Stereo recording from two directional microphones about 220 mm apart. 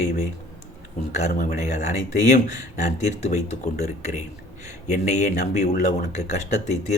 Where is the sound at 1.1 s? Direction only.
35° left (ahead or behind).